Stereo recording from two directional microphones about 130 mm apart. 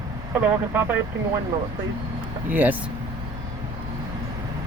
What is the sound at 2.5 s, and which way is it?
Speech, 15° right (ahead or behind).